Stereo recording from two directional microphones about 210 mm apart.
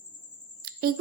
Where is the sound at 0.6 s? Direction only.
45° right (ahead or behind).